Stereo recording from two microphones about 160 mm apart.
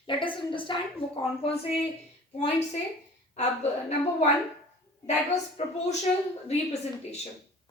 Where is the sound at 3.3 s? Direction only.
40° left (ahead or behind).